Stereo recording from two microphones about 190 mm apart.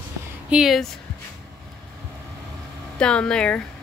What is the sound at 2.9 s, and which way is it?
Speech, 5° left (ahead or behind).